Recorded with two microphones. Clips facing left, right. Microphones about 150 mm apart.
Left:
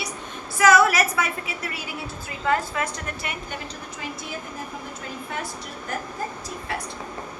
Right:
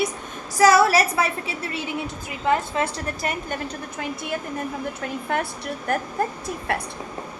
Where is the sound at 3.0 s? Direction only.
40° right (ahead or behind).